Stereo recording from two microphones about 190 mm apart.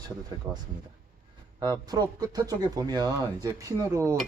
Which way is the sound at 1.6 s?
20° right (ahead or behind).